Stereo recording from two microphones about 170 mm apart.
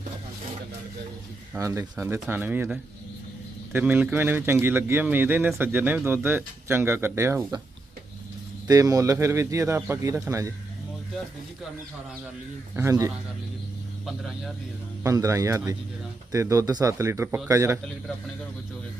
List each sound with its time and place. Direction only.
1.5 s speech: 20° right (ahead or behind)
8.6 s speech: 20° right (ahead or behind)
12.7 s speech: 15° right (ahead or behind)
14.0 s speech: centre (ahead or behind)
15.0 s speech: 20° right (ahead or behind)